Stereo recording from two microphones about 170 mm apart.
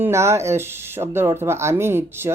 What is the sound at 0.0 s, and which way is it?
Speech, 15° right (ahead or behind).